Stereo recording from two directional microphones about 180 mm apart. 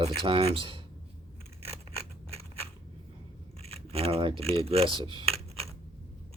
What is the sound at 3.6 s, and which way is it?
Speech, 35° right (ahead or behind).